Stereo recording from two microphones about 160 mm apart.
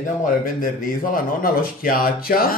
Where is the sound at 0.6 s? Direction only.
60° left (ahead or behind).